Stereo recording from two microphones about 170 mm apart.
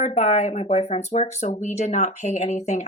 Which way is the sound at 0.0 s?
40° left (ahead or behind).